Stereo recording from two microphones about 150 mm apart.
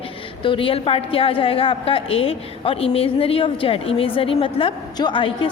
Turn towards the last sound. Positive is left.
turn(degrees=35)  # may be behind; listen again after turning